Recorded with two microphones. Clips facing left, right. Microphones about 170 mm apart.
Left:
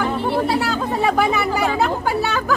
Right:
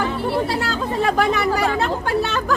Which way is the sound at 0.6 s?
Centre (ahead or behind).